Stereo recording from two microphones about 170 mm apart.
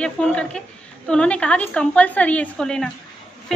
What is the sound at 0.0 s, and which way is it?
A woman's voice, 5° left (ahead or behind).